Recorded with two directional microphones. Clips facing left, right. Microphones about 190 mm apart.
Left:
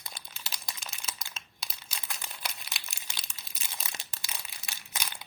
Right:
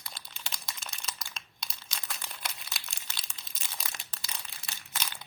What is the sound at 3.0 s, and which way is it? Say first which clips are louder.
Crumpling: even; 10° left (ahead or behind).